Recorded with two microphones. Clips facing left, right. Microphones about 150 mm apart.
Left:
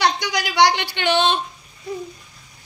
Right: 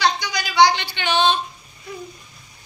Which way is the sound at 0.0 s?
75° left (ahead or behind).